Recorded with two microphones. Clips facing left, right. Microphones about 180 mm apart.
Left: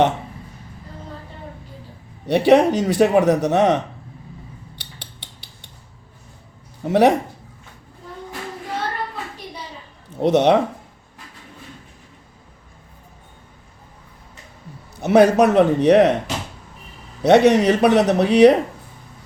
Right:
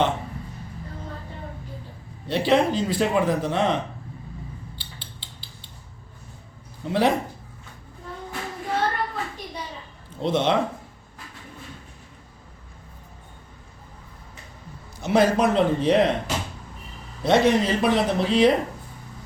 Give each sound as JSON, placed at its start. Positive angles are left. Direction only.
{"t": 2.2, "sound": "a man's voice", "side_deg": 75}
{"t": 6.8, "sound": "a man's voice", "side_deg": 65}
{"t": 10.2, "sound": "a man's voice", "side_deg": 70}
{"t": 15.0, "sound": "a man's voice", "side_deg": 65}
{"t": 17.2, "sound": "a man's voice", "side_deg": 70}